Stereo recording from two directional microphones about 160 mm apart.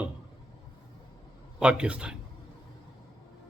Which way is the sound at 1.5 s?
5° right (ahead or behind).